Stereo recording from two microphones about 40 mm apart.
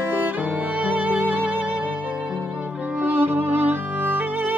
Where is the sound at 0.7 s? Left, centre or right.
Right.